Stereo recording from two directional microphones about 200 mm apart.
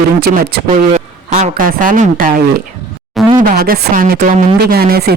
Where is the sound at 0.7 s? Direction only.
40° right (ahead or behind).